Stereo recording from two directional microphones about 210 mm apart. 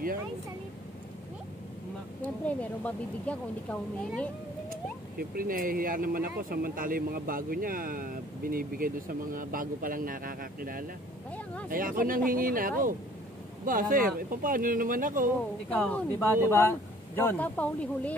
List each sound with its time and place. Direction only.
2.4 s a woman's voice: 5° left (ahead or behind)
5.3 s speech: 40° right (ahead or behind)
15.7 s a woman's voice: 5° left (ahead or behind)